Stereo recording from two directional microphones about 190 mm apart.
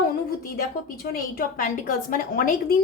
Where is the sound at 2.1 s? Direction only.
50° left (ahead or behind).